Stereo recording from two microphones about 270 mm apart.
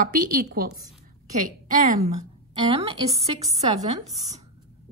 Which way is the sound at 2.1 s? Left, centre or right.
Right.